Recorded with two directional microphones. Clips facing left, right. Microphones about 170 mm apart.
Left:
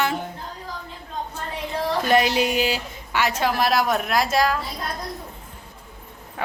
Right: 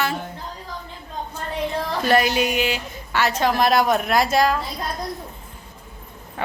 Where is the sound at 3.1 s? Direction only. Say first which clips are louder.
Right 2 dB; 10° left (ahead or behind).